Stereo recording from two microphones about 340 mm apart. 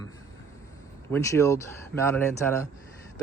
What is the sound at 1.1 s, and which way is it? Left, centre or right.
Speech, centre.